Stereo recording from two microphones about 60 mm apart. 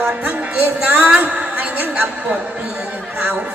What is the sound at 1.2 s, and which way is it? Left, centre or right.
Speech, right.